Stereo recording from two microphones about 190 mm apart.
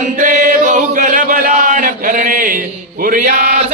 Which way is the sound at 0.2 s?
40° right (ahead or behind).